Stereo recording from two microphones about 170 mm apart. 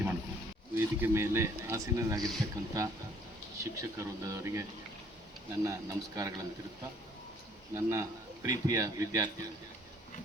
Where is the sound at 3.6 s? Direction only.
20° right (ahead or behind).